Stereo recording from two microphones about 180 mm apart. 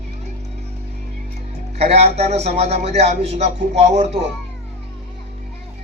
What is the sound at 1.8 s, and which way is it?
Speech, 35° right (ahead or behind).